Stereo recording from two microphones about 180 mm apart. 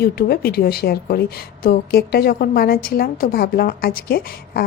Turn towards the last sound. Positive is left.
turn(degrees=60)  # may be behind; listen again after turning